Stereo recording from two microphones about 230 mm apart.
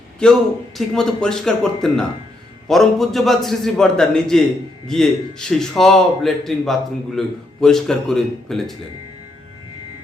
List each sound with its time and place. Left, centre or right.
0.2 s a man's voice: centre